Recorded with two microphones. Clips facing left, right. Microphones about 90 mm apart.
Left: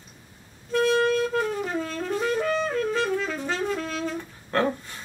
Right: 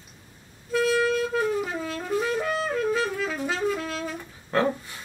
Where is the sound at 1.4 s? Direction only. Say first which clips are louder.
Even; 5° right (ahead or behind).